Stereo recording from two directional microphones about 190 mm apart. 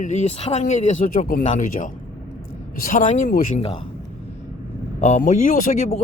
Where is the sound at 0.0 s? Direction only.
35° left (ahead or behind).